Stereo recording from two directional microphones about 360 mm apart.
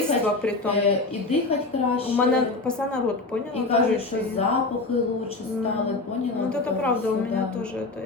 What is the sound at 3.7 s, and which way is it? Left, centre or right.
Speech, centre.